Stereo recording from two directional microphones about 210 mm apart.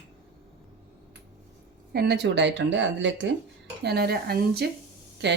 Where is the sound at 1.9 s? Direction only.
50° right (ahead or behind).